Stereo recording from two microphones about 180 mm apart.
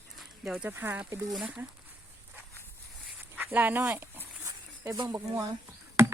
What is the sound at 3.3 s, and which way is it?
Speech, 10° right (ahead or behind).